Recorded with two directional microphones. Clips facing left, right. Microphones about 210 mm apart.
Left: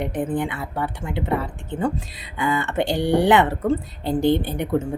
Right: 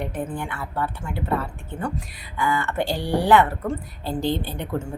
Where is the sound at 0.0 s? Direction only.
15° left (ahead or behind).